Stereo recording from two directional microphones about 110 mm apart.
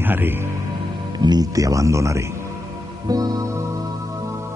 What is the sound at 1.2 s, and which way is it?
Speech, 40° right (ahead or behind).